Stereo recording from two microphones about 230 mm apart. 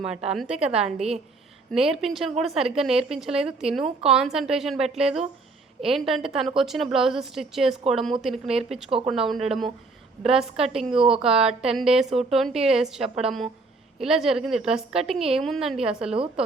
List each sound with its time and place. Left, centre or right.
0.0 s a woman's voice: centre
0.9 s a woman's voice: right
1.7 s a woman's voice: centre
16.1 s a woman's voice: right